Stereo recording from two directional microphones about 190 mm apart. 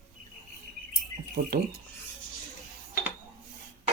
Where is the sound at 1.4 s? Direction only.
45° right (ahead or behind).